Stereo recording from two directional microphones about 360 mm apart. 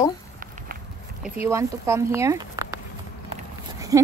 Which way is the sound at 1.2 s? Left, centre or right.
Centre.